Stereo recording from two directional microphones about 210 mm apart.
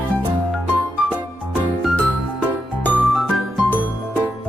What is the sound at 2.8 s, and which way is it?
Music, 10° left (ahead or behind).